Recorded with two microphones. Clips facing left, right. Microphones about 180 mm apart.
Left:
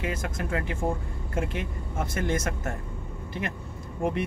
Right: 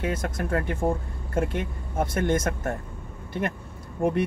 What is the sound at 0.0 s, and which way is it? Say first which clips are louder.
Speech: right 3 dB; 50° right (ahead or behind).